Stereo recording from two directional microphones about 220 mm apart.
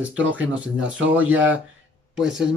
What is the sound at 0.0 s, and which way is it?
A man's voice, 5° right (ahead or behind).